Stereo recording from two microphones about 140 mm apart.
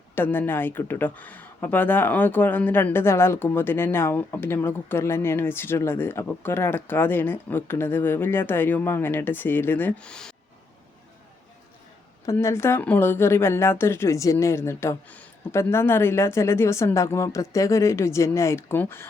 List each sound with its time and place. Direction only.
0.2 s speech: 15° left (ahead or behind)
12.2 s speech: 20° left (ahead or behind)